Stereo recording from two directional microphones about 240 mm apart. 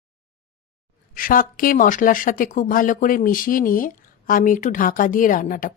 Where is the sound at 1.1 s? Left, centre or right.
Left.